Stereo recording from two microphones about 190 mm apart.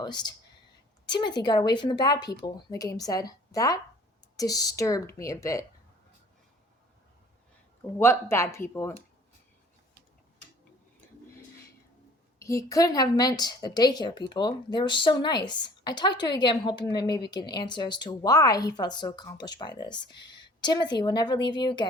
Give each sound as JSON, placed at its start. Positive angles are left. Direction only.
{"t": 0.0, "sound": "a woman's voice", "side_deg": 25}
{"t": 7.9, "sound": "speech", "side_deg": 10}
{"t": 12.4, "sound": "a woman's voice", "side_deg": 15}